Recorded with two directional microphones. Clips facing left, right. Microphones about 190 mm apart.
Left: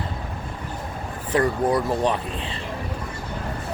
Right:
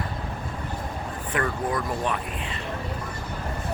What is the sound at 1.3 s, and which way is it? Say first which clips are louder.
Speech: left 7 dB; 35° left (ahead or behind).